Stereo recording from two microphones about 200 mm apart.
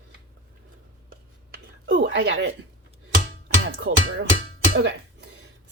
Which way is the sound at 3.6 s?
70° right (ahead or behind).